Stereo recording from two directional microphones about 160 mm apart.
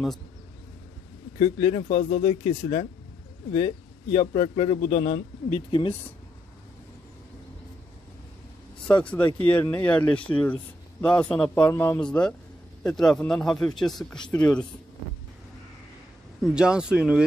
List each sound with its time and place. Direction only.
1.4 s a man's voice: 40° left (ahead or behind)
5.7 s a man's voice: 30° left (ahead or behind)
8.8 s a man's voice: 10° left (ahead or behind)
16.4 s a man's voice: 5° right (ahead or behind)